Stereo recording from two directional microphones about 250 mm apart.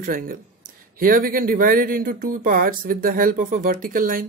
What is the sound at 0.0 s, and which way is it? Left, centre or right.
Speech, right.